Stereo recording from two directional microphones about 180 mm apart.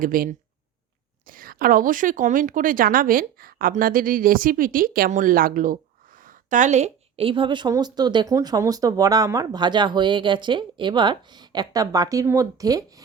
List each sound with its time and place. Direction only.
0.0 s a woman's voice: 50° right (ahead or behind); by 12.8 s 20° right (ahead or behind)